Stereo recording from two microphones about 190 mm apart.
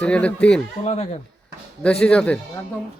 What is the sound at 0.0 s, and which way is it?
Speech, 5° left (ahead or behind).